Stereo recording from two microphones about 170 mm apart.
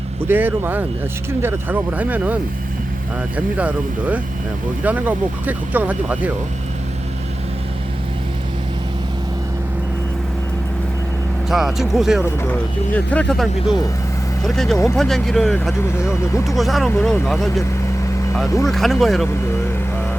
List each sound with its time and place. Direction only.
0.3 s speech: 10° right (ahead or behind)
11.4 s speech: centre (ahead or behind)
12.4 s speech: 10° left (ahead or behind)
15.8 s speech: 15° left (ahead or behind)
16.6 s speech: centre (ahead or behind)
18.4 s speech: 20° left (ahead or behind)
18.7 s speech: centre (ahead or behind)